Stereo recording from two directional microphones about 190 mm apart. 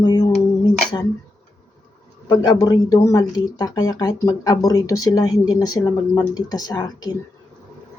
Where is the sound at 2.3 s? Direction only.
20° left (ahead or behind).